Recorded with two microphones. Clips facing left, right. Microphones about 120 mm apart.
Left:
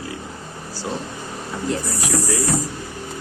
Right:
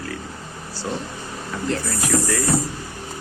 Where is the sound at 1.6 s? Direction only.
15° left (ahead or behind).